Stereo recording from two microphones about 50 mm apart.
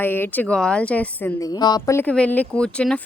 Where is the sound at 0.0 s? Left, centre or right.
Left.